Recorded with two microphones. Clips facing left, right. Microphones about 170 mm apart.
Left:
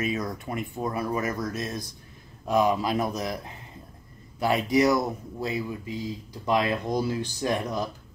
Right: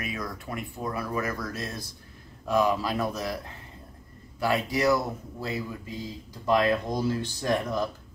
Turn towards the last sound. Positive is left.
turn(degrees=15)  # may be behind; listen again after turning